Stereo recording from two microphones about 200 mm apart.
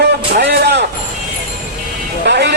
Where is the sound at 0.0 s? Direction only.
55° right (ahead or behind).